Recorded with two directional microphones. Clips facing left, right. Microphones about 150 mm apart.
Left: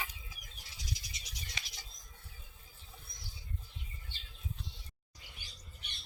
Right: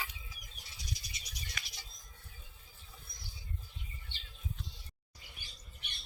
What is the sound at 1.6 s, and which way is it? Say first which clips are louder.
Bird: even; 25° left (ahead or behind).